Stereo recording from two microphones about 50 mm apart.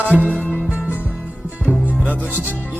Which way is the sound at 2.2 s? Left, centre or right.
Right.